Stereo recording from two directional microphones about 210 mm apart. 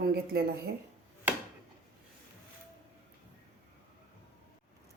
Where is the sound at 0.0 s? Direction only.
50° right (ahead or behind).